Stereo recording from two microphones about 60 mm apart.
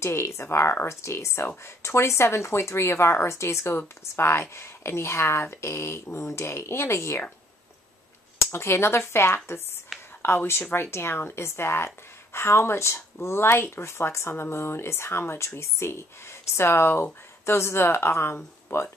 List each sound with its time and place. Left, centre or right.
0.0 s speech: left
8.5 s speech: left
9.9 s whispering: centre
10.2 s speech: left